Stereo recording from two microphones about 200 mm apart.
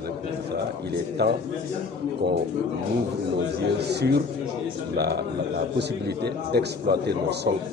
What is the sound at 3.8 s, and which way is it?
A man's voice, 55° right (ahead or behind).